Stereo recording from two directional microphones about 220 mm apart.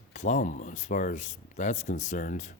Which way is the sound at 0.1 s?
35° left (ahead or behind).